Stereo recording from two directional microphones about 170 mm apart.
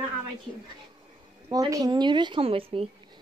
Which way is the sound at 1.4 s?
20° right (ahead or behind).